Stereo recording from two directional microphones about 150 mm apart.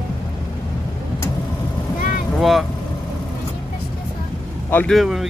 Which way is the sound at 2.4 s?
Centre (ahead or behind).